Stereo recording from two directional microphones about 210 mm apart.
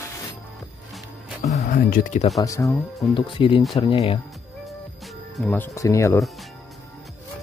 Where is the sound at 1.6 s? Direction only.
40° left (ahead or behind).